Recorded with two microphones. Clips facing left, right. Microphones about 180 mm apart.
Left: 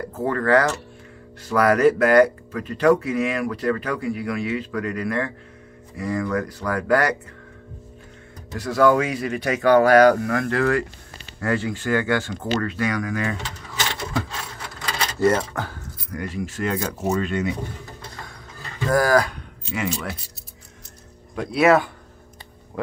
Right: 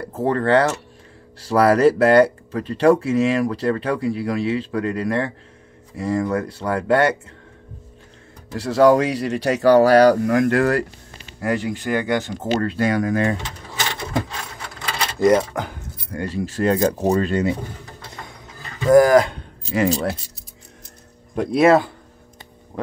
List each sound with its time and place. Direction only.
0.0 s speech: 30° right (ahead or behind)
8.5 s speech: 30° right (ahead or behind)
10.5 s speech: 45° right (ahead or behind)
11.4 s speech: 15° right (ahead or behind)
12.5 s speech: 30° right (ahead or behind)
15.1 s keys jangling: 15° right (ahead or behind)
16.1 s speech: 30° right (ahead or behind)
18.9 s speech: 20° right (ahead or behind)
19.6 s speech: 40° right (ahead or behind)
21.5 s speech: 30° right (ahead or behind)